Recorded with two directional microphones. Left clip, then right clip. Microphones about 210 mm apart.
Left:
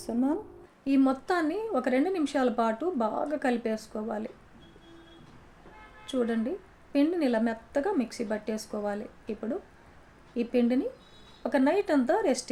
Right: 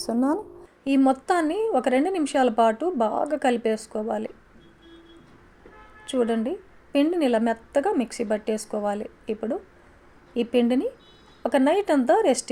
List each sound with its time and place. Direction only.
0.0 s a woman's voice: 30° right (ahead or behind)
6.1 s speech: 35° right (ahead or behind)